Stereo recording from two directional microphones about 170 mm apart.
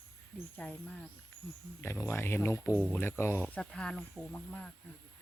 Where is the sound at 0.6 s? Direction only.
5° left (ahead or behind).